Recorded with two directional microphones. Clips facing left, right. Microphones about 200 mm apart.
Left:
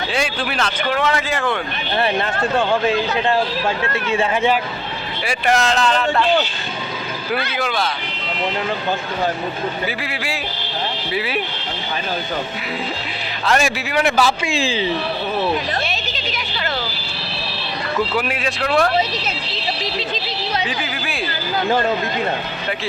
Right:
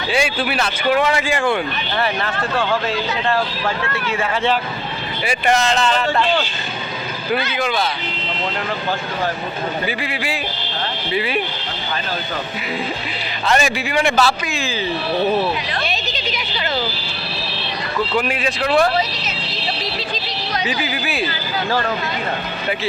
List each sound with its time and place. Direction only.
0.1 s speech: 5° right (ahead or behind)
2.0 s speech: 25° left (ahead or behind)
5.2 s speech: centre (ahead or behind)
10.0 s speech: centre (ahead or behind)
13.5 s speech: centre (ahead or behind)
14.4 s speech: 30° left (ahead or behind)
18.1 s speech: 5° left (ahead or behind)
20.7 s speech: 5° right (ahead or behind)
21.7 s speech: 20° left (ahead or behind)